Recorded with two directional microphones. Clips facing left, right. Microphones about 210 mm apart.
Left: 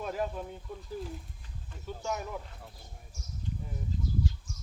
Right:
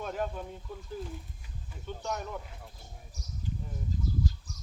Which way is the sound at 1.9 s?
5° left (ahead or behind).